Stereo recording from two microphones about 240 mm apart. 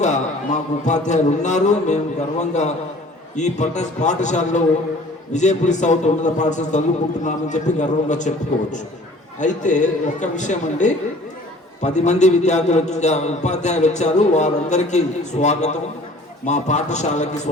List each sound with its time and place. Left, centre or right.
0.0 s a man's voice: left
9.4 s a man's voice: left